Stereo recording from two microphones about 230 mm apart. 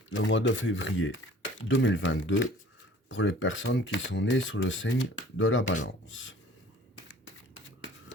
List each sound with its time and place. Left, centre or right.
0.1 s speech: left